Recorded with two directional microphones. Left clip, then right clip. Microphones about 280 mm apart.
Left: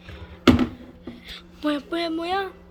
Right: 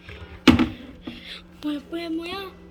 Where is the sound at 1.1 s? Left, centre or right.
Centre.